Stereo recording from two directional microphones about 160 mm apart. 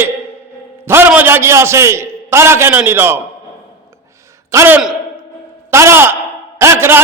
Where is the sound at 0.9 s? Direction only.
15° right (ahead or behind).